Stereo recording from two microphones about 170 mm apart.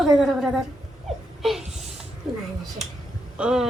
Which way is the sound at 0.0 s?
Centre (ahead or behind).